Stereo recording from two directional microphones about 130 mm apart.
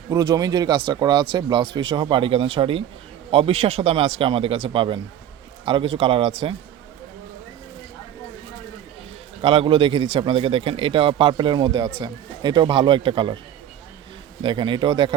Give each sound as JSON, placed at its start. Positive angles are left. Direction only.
{"t": 0.1, "sound": "speech", "side_deg": -30}
{"t": 9.4, "sound": "speech", "side_deg": -45}
{"t": 14.4, "sound": "speech", "side_deg": -40}